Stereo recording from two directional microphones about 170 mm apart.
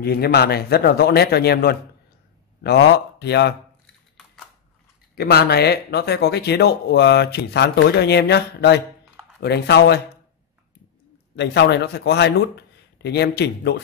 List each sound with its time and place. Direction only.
0.0 s speech: 65° left (ahead or behind)
5.1 s speech: 70° left (ahead or behind)
11.3 s speech: 85° left